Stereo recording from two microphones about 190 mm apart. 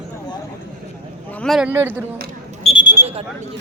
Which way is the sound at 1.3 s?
5° left (ahead or behind).